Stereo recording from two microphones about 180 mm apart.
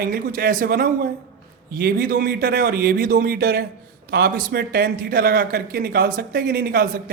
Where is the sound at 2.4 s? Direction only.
70° right (ahead or behind).